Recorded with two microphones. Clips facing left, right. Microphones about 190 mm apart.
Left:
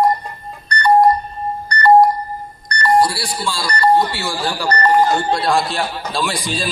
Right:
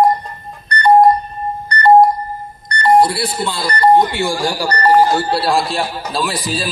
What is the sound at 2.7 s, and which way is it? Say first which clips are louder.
A man's voice: right 3 dB; 20° right (ahead or behind).